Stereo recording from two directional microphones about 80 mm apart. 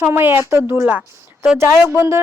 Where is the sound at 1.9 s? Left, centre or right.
Right.